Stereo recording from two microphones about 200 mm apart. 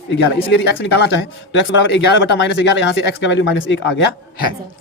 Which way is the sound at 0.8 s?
65° left (ahead or behind).